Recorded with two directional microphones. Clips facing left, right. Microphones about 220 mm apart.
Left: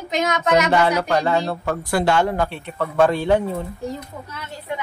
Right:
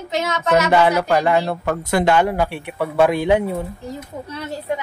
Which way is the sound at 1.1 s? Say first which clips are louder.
Right 2 dB; 15° right (ahead or behind).